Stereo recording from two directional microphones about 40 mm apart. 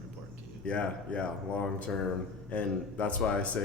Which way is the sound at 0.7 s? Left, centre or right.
Left.